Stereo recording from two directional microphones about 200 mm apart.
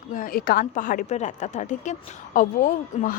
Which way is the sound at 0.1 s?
45° left (ahead or behind).